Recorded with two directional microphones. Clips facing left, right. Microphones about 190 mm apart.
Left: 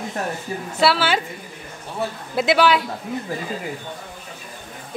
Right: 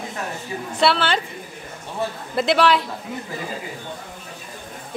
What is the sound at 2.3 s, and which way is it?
Speech, centre (ahead or behind).